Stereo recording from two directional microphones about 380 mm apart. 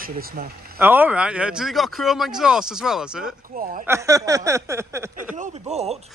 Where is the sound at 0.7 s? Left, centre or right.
Centre.